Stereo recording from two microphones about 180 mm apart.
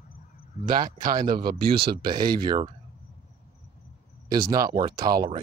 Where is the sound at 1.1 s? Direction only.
55° right (ahead or behind).